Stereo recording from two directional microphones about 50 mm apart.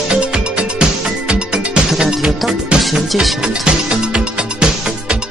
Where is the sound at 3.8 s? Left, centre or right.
Centre.